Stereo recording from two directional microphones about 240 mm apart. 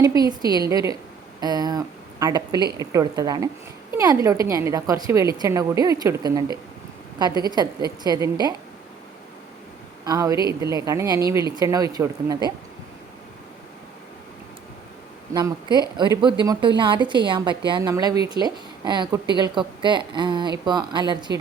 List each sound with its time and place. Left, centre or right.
0.0 s speech: centre
10.1 s speech: centre
15.3 s a woman's voice: centre